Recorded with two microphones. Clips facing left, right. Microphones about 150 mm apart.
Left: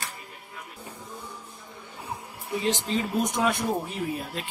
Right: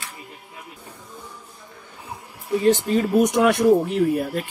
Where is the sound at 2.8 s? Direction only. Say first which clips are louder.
Right 8 dB; 65° right (ahead or behind).